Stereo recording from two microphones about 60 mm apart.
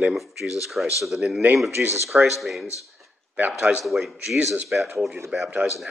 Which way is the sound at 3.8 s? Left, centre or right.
Centre.